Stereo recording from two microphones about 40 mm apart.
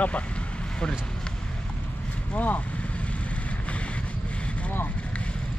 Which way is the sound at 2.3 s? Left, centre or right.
Left.